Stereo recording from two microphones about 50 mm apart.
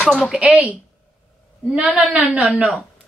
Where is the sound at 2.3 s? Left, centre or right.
Right.